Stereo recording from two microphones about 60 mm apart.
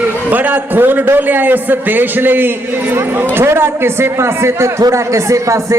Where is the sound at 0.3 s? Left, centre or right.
Right.